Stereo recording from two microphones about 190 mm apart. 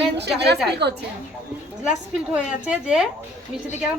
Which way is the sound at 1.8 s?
5° right (ahead or behind).